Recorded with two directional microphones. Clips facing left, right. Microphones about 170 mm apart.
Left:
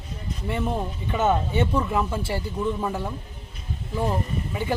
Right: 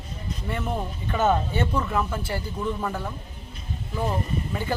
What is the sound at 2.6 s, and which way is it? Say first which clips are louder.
Speech: left 2 dB; 10° left (ahead or behind).